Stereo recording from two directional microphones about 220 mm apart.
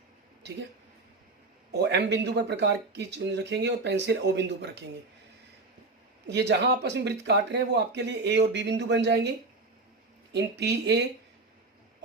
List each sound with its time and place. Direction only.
1.7 s speech: 50° right (ahead or behind)
6.2 s speech: 50° right (ahead or behind)
10.6 s speech: 50° right (ahead or behind)